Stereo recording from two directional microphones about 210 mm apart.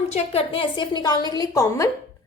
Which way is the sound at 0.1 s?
25° left (ahead or behind).